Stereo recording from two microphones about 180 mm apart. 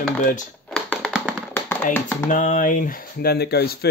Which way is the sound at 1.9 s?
10° left (ahead or behind).